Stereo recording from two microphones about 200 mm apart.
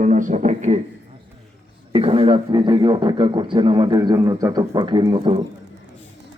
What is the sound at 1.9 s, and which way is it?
A man's voice, 30° right (ahead or behind).